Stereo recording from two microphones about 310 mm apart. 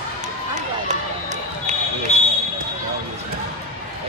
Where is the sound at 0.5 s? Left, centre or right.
Right.